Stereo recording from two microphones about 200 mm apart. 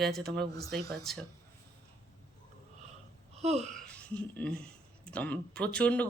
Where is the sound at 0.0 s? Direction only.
Centre (ahead or behind).